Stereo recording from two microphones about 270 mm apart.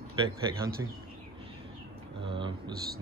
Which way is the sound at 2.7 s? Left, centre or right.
Right.